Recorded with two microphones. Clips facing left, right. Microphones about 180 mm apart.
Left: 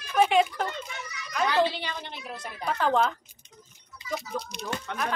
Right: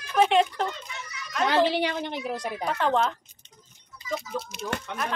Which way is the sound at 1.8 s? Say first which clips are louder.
Right 8 dB; 55° right (ahead or behind).